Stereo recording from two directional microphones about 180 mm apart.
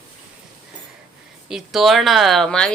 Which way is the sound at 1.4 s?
Centre (ahead or behind).